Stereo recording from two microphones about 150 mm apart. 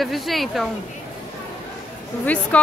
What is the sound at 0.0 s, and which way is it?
Speech, centre (ahead or behind).